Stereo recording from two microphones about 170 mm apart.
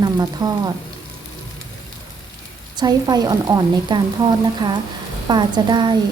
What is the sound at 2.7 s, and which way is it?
Speech, 25° right (ahead or behind).